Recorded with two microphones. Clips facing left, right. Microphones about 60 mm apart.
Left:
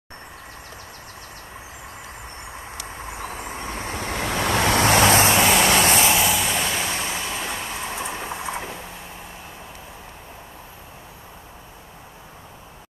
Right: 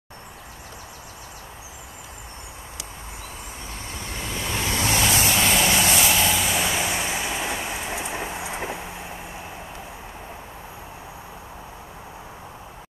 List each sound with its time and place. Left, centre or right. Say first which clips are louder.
3.1 s vehicle: left 6 dB; left
6.1 s vehicle: left 1 dB; centre